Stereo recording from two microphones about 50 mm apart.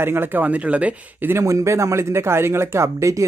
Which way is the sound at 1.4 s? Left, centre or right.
Right.